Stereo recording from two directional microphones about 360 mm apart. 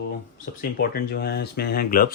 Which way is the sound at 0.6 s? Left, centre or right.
Left.